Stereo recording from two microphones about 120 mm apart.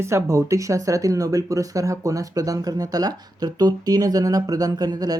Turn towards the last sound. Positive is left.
turn(degrees=-35)  # may be behind; listen again after turning